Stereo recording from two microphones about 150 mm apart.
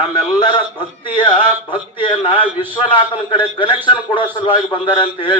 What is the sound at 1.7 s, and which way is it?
A man's voice, 35° left (ahead or behind).